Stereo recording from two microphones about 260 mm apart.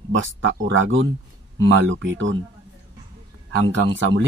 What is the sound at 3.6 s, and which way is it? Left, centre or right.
Speech, right.